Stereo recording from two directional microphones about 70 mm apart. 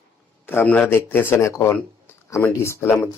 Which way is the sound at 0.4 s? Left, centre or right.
Left.